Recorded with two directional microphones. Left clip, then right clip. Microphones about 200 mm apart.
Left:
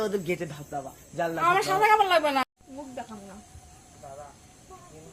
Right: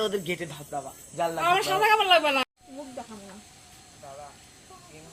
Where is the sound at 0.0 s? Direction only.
50° left (ahead or behind).